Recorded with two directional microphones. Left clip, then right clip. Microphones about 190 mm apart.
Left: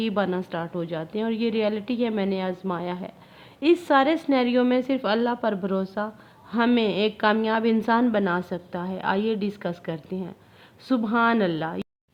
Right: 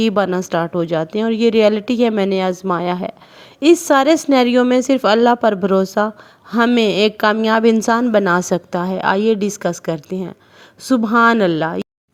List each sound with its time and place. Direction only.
0.0 s a woman's voice: 40° right (ahead or behind)